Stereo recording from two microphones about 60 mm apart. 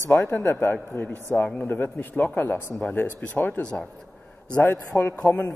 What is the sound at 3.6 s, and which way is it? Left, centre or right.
Speech, centre.